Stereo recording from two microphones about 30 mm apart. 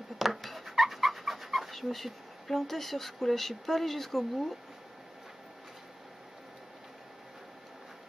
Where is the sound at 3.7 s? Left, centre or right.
Centre.